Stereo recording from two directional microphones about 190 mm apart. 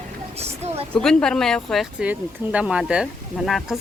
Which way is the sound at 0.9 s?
5° left (ahead or behind).